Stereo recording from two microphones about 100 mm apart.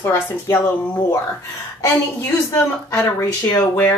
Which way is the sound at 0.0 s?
25° left (ahead or behind).